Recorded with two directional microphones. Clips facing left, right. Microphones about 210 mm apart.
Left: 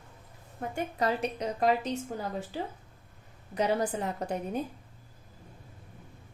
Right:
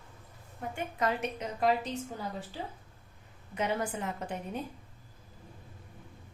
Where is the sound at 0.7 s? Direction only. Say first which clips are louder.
Left 2 dB; 35° left (ahead or behind).